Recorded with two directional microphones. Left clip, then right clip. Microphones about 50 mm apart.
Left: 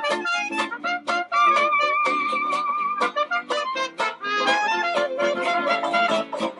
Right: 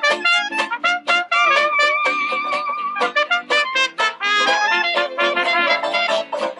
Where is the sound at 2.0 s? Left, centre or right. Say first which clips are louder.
Right 3 dB; centre.